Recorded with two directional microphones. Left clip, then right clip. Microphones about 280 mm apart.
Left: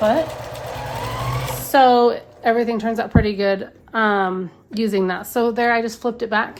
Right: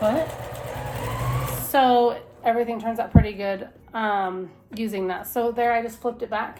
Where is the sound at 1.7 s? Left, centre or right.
Left.